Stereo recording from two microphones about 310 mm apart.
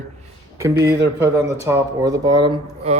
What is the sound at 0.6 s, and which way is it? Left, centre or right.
Speech, centre.